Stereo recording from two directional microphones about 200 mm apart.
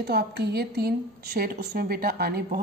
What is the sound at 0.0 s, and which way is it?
A woman's voice, 55° right (ahead or behind).